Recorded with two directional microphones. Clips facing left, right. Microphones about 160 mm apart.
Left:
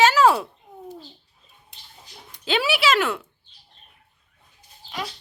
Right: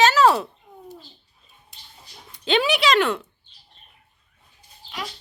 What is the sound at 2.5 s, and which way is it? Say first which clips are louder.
Speech: right 2 dB; 5° left (ahead or behind).